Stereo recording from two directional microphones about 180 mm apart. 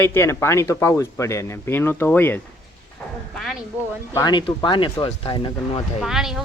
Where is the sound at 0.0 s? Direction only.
15° left (ahead or behind).